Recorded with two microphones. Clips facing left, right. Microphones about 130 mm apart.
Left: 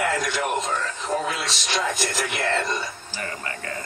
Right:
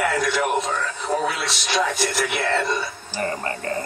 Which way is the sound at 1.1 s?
15° right (ahead or behind).